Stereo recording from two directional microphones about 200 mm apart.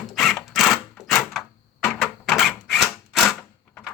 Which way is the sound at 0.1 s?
Centre (ahead or behind).